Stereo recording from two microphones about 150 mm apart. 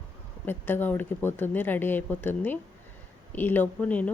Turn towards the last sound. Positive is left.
turn(degrees=10)  # may be behind; listen again after turning